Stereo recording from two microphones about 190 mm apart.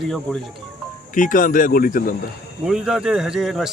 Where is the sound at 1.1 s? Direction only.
45° left (ahead or behind).